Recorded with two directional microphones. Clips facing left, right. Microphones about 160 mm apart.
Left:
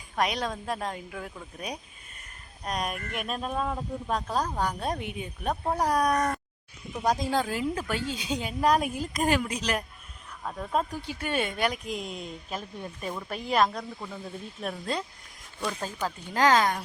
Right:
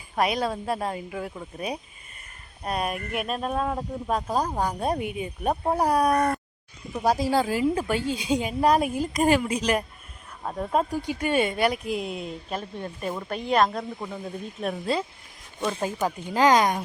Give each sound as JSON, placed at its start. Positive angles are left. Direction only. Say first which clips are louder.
{"t": 0.2, "sound": "speech", "louder": "right 4 dB", "side_deg": -5}
{"t": 7.9, "sound": "speech", "louder": "right 5 dB", "side_deg": -45}
{"t": 8.1, "sound": "speech", "louder": "right 6 dB", "side_deg": -10}
{"t": 10.4, "sound": "speech", "louder": "right 5 dB", "side_deg": -25}
{"t": 10.7, "sound": "speech", "louder": "right 4 dB", "side_deg": -10}
{"t": 13.9, "sound": "speech", "louder": "right 5 dB", "side_deg": -20}
{"t": 14.6, "sound": "speech", "louder": "right 5 dB", "side_deg": 0}
{"t": 15.6, "sound": "speech", "louder": "right 5 dB", "side_deg": -20}